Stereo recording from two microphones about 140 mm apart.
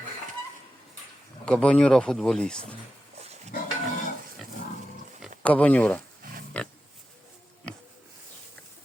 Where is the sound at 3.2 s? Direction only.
50° right (ahead or behind).